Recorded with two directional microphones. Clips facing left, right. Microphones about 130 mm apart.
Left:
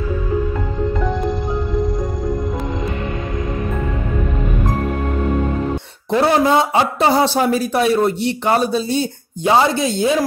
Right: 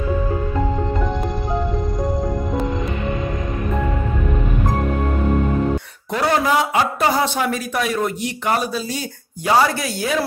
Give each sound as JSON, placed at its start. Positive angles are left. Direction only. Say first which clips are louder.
{"t": 6.1, "sound": "a man's voice", "louder": "left 4 dB", "side_deg": 25}